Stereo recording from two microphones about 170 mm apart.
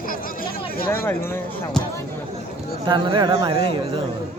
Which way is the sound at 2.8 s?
25° right (ahead or behind).